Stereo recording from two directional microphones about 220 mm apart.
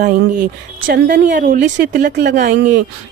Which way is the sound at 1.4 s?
35° right (ahead or behind).